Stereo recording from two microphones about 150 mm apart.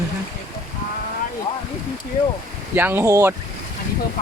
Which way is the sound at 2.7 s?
15° right (ahead or behind).